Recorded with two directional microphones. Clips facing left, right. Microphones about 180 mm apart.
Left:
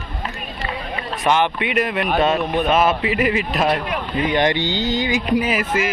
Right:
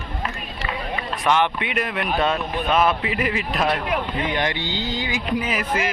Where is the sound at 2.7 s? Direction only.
5° left (ahead or behind).